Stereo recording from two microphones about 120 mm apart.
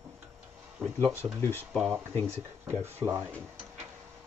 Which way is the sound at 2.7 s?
20° right (ahead or behind).